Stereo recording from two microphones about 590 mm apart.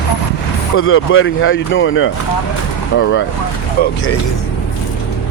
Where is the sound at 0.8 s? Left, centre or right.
Left.